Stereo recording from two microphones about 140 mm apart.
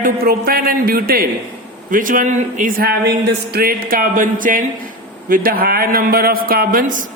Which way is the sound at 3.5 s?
90° right.